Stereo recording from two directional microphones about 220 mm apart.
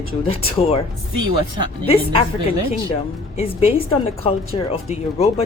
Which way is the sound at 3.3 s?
30° left (ahead or behind).